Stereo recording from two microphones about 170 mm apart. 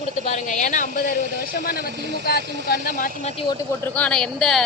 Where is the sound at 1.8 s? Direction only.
85° right.